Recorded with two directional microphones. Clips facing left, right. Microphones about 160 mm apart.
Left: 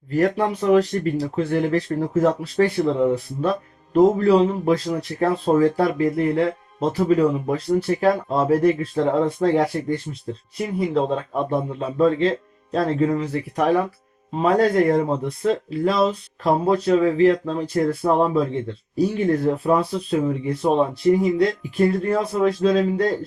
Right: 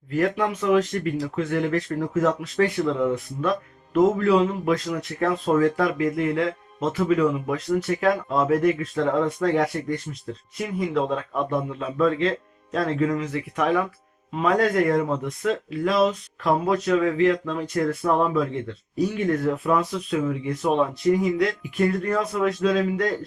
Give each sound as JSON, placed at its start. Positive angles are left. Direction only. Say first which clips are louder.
{"t": 0.1, "sound": "speech", "louder": "left 3 dB", "side_deg": 35}